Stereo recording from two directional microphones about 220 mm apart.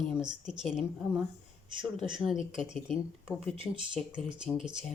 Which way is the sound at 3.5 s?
25° right (ahead or behind).